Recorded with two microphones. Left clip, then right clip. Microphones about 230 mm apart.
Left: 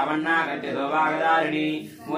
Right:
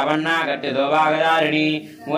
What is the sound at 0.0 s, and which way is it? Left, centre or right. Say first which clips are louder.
Speech: right 3 dB; right.